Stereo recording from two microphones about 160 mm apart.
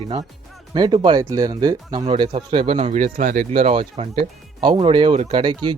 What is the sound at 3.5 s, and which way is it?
Speech, 35° right (ahead or behind).